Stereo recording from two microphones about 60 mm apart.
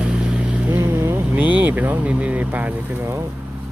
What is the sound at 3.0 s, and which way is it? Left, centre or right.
Speech, right.